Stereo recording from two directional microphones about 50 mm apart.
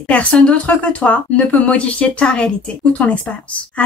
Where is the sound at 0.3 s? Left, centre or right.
Left.